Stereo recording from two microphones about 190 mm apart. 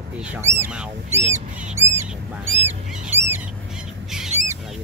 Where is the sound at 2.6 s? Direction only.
10° right (ahead or behind).